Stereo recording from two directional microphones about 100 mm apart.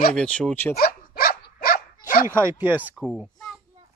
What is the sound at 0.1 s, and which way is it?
Speech, 10° left (ahead or behind).